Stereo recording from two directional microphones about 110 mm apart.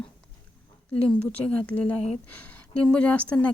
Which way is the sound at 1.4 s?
10° left (ahead or behind).